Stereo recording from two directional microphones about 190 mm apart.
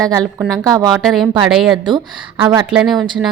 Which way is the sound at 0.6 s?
20° right (ahead or behind).